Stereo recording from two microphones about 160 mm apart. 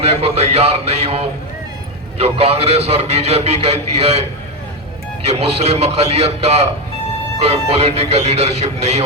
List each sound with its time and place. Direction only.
0.0 s a man's voice: 40° right (ahead or behind)